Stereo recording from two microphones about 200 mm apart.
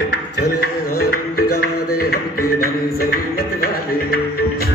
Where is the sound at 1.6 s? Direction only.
50° left (ahead or behind).